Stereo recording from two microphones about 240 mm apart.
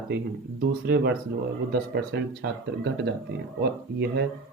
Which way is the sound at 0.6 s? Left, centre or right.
Right.